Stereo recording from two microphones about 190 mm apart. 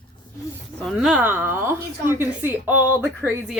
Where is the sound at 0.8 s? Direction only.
Centre (ahead or behind).